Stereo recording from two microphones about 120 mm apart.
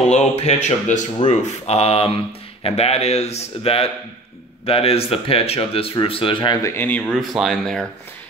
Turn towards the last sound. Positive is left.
turn(degrees=0)  # may be behind; listen again after turning